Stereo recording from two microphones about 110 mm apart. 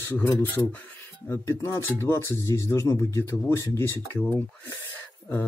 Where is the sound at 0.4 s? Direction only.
20° left (ahead or behind).